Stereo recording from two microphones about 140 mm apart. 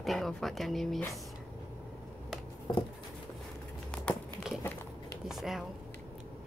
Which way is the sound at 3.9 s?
5° left (ahead or behind).